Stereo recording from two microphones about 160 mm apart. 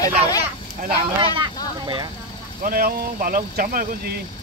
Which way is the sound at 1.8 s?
25° right (ahead or behind).